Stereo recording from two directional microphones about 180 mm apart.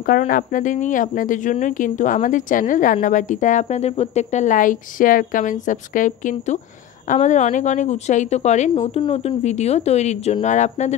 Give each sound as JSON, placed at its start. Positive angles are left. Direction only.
{"t": 0.0, "sound": "speech", "side_deg": 55}